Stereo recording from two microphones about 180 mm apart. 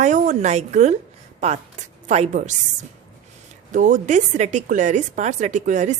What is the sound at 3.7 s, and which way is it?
A woman's voice, 45° right (ahead or behind).